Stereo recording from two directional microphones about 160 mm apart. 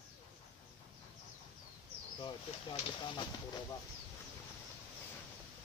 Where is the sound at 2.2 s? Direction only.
30° left (ahead or behind).